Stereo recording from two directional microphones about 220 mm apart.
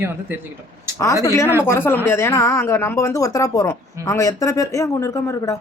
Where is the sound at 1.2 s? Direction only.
15° left (ahead or behind).